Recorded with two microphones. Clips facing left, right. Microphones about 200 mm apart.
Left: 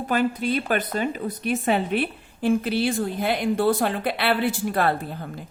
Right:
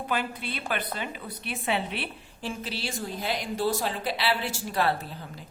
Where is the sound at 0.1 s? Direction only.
45° left (ahead or behind).